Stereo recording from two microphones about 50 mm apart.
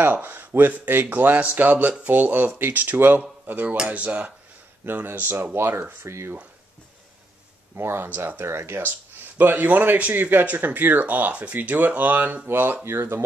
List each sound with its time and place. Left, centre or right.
0.0 s speech: right
6.0 s speech: right
7.7 s speech: right
12.8 s speech: right